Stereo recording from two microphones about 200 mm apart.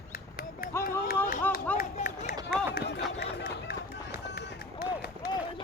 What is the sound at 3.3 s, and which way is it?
Run, 60° left (ahead or behind).